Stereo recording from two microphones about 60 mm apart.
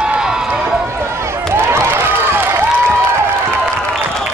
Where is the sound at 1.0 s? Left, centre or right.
Right.